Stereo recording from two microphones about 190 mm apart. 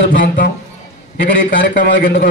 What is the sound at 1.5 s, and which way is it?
Speech, 70° left (ahead or behind).